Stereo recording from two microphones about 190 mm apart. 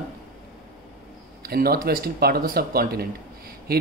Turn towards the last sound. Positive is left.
turn(degrees=-50)  # may be behind; listen again after turning